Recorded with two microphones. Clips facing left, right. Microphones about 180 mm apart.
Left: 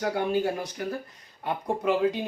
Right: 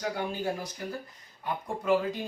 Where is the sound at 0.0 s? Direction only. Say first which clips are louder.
Left 6 dB; 60° left (ahead or behind).